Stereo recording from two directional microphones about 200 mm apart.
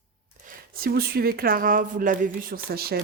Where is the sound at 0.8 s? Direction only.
50° right (ahead or behind).